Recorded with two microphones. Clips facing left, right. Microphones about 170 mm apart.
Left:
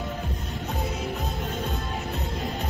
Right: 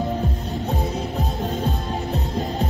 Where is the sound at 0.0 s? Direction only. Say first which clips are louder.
Right 8 dB; 35° right (ahead or behind).